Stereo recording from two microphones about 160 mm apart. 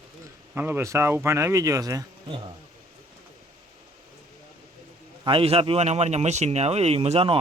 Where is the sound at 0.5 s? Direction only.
15° right (ahead or behind).